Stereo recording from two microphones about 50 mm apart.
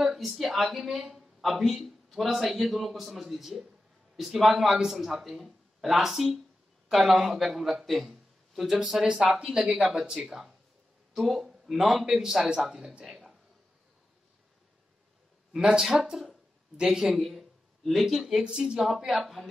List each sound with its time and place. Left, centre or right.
0.0 s a man's voice: centre
11.1 s a man's voice: centre
13.0 s a sound: centre
15.5 s speech: centre
16.0 s a man's voice: centre
18.1 s a man's voice: centre
19.0 s a man's voice: centre